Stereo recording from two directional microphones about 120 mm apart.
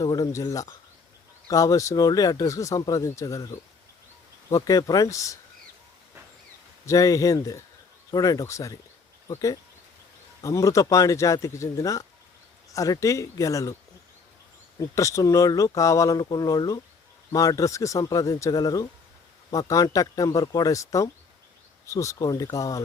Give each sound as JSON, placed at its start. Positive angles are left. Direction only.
{"t": 0.0, "sound": "speech", "side_deg": 30}
{"t": 6.8, "sound": "speech", "side_deg": 30}
{"t": 14.8, "sound": "speech", "side_deg": 25}